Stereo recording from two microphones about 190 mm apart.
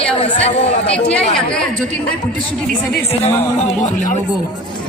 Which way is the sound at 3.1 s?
35° left (ahead or behind).